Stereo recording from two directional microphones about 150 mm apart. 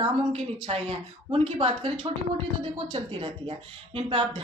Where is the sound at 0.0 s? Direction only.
40° right (ahead or behind).